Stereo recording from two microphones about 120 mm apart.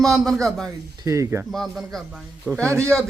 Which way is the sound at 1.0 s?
25° right (ahead or behind).